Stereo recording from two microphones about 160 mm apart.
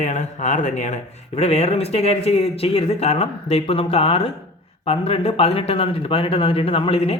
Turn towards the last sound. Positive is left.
turn(degrees=35)  # may be behind; listen again after turning